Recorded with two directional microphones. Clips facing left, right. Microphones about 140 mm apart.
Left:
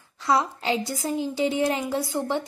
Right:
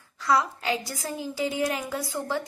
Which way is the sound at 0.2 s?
25° left (ahead or behind).